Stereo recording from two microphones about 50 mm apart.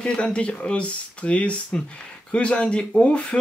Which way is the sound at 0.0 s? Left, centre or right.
Left.